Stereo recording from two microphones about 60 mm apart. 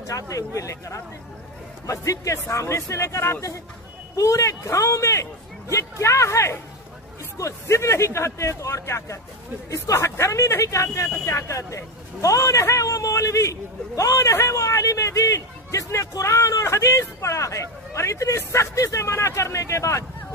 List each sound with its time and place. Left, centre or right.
0.3 s speech: left
7.6 s speech: left